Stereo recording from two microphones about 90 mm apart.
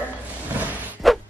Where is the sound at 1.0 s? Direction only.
Centre (ahead or behind).